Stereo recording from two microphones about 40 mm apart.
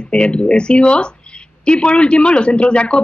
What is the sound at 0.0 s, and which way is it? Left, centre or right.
Speech, left.